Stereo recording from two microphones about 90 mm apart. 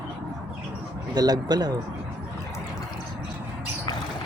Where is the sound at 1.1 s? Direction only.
50° right (ahead or behind).